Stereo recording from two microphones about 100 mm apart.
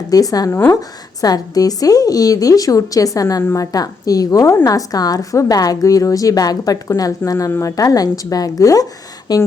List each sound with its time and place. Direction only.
0.1 s a woman's voice: 35° left (ahead or behind)